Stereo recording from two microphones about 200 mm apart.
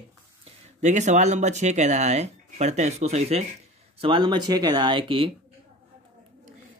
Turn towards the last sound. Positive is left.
turn(degrees=-25)  # may be behind; listen again after turning